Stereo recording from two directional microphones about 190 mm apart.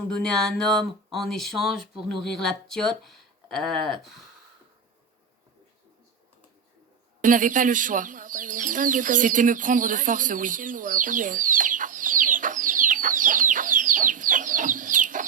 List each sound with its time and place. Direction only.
0.1 s speech: 5° left (ahead or behind)
7.2 s chicken: 45° right (ahead or behind)